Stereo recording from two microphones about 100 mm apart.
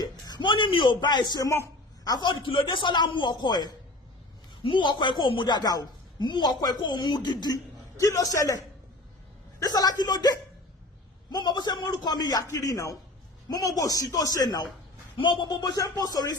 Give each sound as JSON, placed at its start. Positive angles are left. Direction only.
{"t": 0.0, "sound": "a man's voice", "side_deg": 45}
{"t": 1.5, "sound": "a sound", "side_deg": 30}
{"t": 2.2, "sound": "a woman's voice", "side_deg": 55}